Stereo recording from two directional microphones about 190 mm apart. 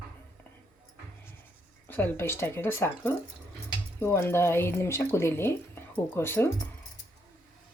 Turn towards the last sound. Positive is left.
turn(degrees=10)  # may be behind; listen again after turning